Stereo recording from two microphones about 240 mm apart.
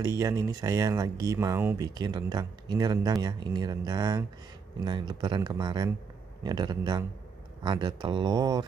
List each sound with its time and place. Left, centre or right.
0.2 s speech: centre